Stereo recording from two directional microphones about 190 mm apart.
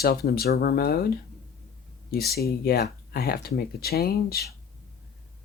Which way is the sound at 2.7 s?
55° left (ahead or behind).